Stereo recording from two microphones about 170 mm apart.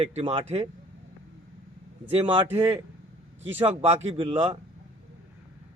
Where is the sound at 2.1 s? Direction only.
30° right (ahead or behind).